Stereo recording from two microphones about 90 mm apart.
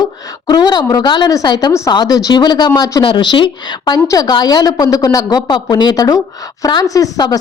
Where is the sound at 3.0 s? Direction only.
65° left (ahead or behind).